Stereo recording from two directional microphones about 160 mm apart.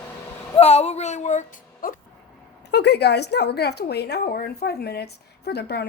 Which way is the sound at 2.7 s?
90° left.